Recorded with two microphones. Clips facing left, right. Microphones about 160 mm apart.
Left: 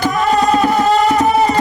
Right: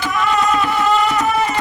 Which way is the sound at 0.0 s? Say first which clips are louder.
Left 4 dB; 40° left (ahead or behind).